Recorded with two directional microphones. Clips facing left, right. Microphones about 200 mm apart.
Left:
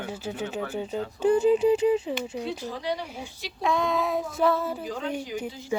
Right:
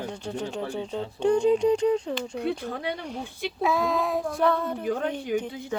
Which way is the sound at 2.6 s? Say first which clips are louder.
Even; 55° right (ahead or behind).